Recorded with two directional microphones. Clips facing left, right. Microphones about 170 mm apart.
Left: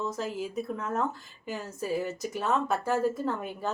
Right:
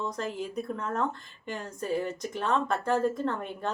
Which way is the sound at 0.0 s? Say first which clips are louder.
Left 1 dB; 5° left (ahead or behind).